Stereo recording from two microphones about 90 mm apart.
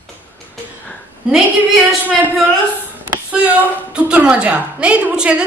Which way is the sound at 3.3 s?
15° right (ahead or behind).